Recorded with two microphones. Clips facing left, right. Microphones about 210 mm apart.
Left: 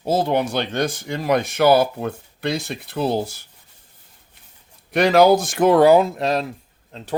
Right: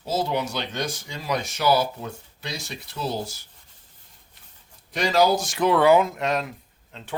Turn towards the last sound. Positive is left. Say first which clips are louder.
# left 7 dB
turn(degrees=40)  # may be behind; listen again after turning